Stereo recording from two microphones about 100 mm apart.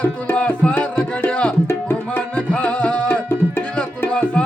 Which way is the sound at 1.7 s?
20° left (ahead or behind).